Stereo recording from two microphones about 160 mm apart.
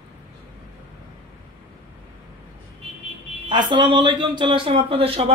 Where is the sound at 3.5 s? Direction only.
30° right (ahead or behind).